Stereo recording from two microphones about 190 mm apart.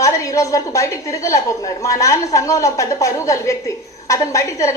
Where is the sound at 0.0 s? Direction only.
15° left (ahead or behind).